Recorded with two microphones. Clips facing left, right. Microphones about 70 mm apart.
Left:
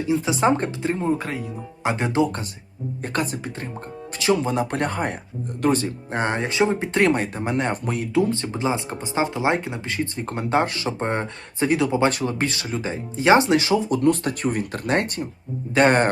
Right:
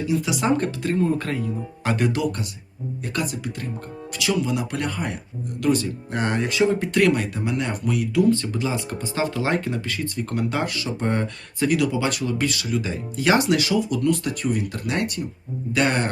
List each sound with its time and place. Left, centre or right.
0.1 s speech: left